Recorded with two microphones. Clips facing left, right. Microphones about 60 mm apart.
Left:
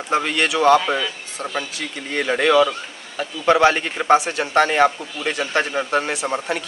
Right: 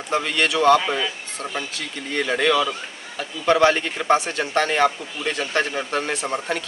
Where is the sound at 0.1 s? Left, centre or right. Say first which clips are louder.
Left 2 dB; centre.